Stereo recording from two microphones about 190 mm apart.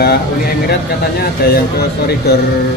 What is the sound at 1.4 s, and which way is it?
Speech, 55° left (ahead or behind).